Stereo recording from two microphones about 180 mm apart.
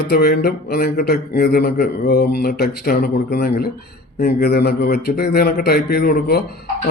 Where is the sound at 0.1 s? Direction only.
60° left (ahead or behind).